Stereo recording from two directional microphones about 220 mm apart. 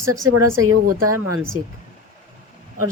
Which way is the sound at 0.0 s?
15° right (ahead or behind).